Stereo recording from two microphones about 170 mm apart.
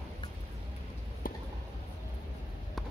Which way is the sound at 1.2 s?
55° left (ahead or behind).